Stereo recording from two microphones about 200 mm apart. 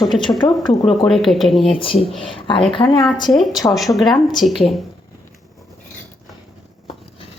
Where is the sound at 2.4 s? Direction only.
25° left (ahead or behind).